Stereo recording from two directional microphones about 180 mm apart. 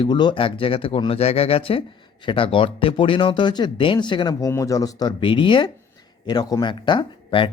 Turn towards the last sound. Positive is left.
turn(degrees=30)  # may be behind; listen again after turning